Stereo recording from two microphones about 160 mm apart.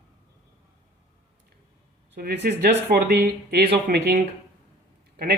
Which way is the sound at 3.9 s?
90° right.